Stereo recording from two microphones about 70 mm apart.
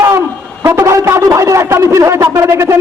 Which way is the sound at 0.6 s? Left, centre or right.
Right.